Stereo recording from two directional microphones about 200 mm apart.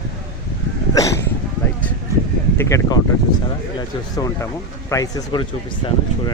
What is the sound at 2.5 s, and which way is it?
Speech, 15° left (ahead or behind).